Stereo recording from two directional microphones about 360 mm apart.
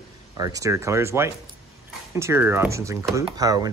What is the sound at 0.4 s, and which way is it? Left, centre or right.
Speech, centre.